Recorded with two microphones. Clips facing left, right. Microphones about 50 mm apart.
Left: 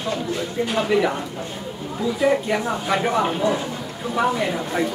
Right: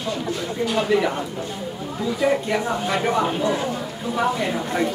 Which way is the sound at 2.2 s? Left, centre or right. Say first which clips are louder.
Left 1 dB; centre.